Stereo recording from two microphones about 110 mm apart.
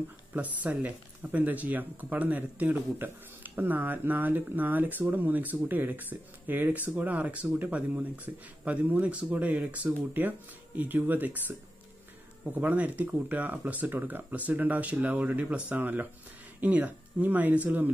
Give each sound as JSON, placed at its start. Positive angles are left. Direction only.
{"t": 0.3, "sound": "speech", "side_deg": -15}
{"t": 12.5, "sound": "speech", "side_deg": -15}